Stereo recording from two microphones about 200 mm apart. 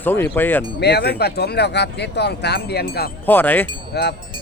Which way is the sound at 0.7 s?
55° left (ahead or behind).